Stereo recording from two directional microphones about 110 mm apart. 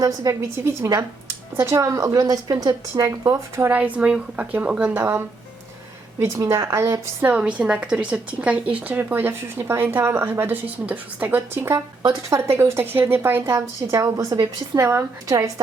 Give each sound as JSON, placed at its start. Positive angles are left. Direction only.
{"t": 0.0, "sound": "a woman's voice", "side_deg": -30}
{"t": 3.7, "sound": "a woman's voice", "side_deg": -15}
{"t": 6.1, "sound": "a woman's voice", "side_deg": -25}